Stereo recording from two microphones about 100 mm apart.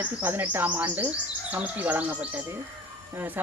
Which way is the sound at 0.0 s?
20° right (ahead or behind).